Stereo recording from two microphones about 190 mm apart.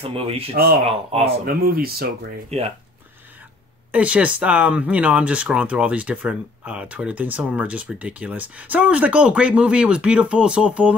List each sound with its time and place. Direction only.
0.0 s speech: 30° right (ahead or behind)
1.6 s speech: 50° right (ahead or behind)
3.9 s speech: 5° right (ahead or behind)